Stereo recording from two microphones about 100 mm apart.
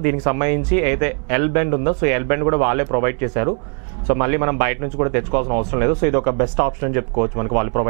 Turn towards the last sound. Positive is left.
turn(degrees=-20)  # may be behind; listen again after turning